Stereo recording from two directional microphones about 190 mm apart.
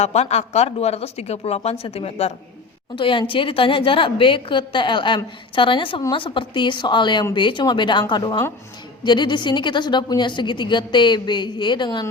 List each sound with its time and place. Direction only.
0.0 s a woman's voice: 35° left (ahead or behind)